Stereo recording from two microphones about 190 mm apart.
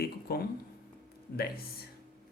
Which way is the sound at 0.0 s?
55° left (ahead or behind).